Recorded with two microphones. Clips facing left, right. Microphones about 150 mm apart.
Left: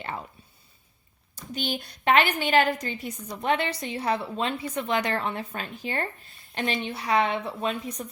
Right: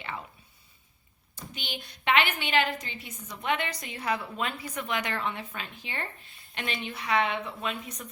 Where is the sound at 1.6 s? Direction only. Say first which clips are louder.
Left 10 dB; 40° left (ahead or behind).